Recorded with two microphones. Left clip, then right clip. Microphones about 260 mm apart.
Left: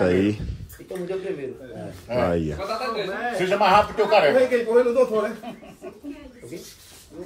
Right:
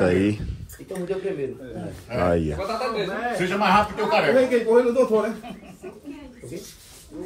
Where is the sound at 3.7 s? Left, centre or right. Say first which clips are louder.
Left 2 dB; left.